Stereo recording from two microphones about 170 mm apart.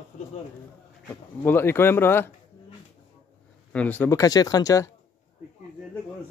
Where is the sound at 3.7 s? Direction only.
10° left (ahead or behind).